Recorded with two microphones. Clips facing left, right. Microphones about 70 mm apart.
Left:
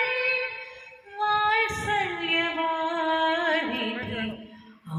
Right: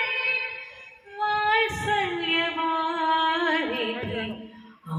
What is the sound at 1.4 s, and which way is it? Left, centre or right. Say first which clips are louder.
Music: right 2 dB; centre.